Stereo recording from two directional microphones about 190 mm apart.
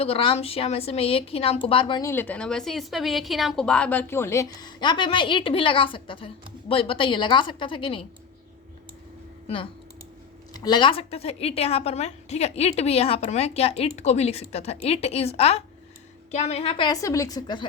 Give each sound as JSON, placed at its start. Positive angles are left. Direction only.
{"t": 0.0, "sound": "a woman's voice", "side_deg": 30}
{"t": 10.5, "sound": "a woman's voice", "side_deg": 20}